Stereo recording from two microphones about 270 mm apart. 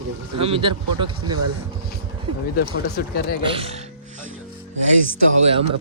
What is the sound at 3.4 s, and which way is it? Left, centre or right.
Speech, right.